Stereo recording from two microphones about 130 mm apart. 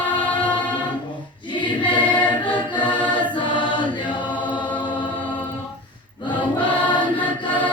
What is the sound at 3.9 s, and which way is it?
Chant, 40° left (ahead or behind).